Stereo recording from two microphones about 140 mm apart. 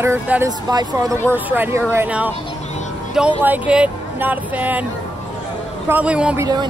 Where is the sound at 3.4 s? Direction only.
10° right (ahead or behind).